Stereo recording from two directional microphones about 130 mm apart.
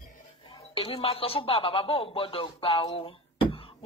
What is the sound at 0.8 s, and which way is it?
Speech, 45° left (ahead or behind).